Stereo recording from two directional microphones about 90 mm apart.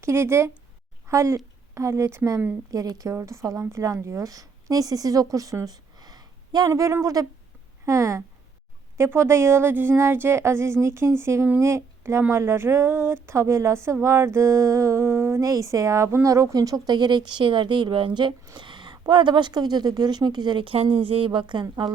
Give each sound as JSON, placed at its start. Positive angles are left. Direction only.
{"t": 0.0, "sound": "speech", "side_deg": -30}
{"t": 2.6, "sound": "a woman's voice", "side_deg": -40}
{"t": 6.7, "sound": "a woman's voice", "side_deg": -35}